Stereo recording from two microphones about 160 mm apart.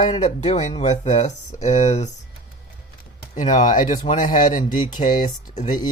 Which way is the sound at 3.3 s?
50° left (ahead or behind).